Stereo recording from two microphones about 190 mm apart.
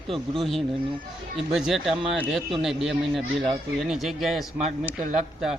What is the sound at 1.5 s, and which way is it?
A man's voice, centre (ahead or behind).